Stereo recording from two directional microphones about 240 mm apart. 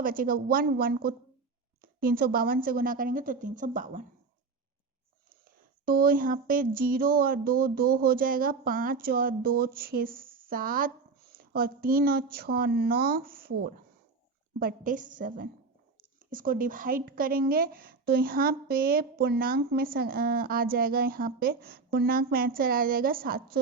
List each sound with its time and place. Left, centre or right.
0.0 s a woman's voice: right
5.5 s a woman's voice: right